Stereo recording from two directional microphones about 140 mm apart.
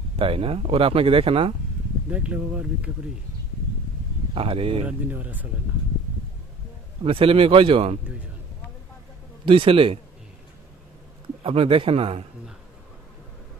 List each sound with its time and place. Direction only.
0.2 s speech: 40° right (ahead or behind)
2.0 s speech: 10° right (ahead or behind)
4.3 s speech: 40° right (ahead or behind)
4.8 s speech: 10° right (ahead or behind)
7.1 s speech: 40° right (ahead or behind)
9.5 s speech: 40° right (ahead or behind)
11.4 s speech: 40° right (ahead or behind)